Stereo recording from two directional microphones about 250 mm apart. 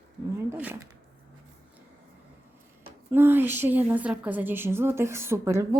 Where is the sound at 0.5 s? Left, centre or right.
Centre.